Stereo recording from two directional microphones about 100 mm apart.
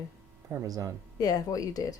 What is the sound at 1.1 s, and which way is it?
Speech, 40° left (ahead or behind).